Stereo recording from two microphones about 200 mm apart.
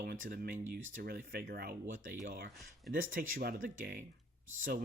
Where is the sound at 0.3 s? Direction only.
45° right (ahead or behind).